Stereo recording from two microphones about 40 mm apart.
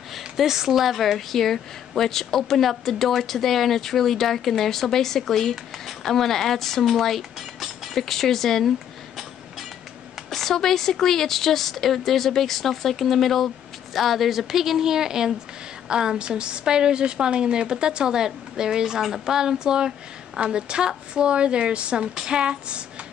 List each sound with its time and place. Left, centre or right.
0.4 s a woman's voice: centre
7.9 s a woman's voice: centre
10.1 s a woman's voice: centre; by 23.0 s right